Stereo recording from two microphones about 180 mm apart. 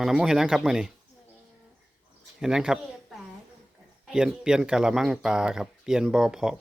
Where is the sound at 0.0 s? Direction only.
5° right (ahead or behind).